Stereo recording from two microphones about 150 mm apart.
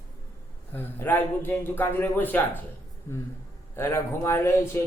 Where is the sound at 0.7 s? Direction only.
15° left (ahead or behind).